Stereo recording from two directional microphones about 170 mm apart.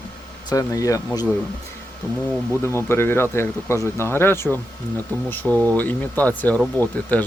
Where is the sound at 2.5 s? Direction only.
15° left (ahead or behind).